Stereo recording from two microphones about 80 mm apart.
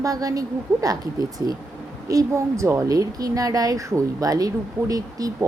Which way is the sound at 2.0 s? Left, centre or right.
Right.